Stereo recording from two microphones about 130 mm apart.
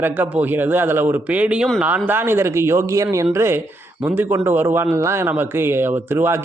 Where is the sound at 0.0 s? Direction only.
15° right (ahead or behind).